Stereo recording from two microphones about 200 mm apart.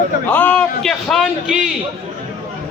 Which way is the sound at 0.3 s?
5° left (ahead or behind).